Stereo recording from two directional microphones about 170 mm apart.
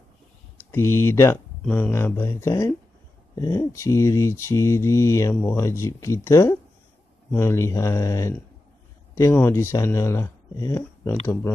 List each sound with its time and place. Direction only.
0.7 s speech: 15° left (ahead or behind)